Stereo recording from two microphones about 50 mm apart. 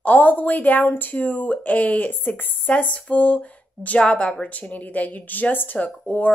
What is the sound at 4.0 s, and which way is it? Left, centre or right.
A woman's voice, left.